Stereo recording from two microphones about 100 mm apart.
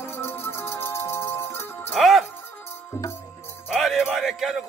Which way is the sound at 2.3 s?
20° left (ahead or behind).